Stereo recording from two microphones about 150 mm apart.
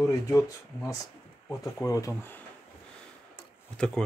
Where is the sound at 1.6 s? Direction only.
20° left (ahead or behind).